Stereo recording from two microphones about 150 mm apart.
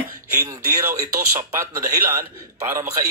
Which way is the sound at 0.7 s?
20° right (ahead or behind).